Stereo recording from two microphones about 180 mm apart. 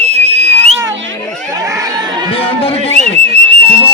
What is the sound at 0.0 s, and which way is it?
Whistle, 35° right (ahead or behind).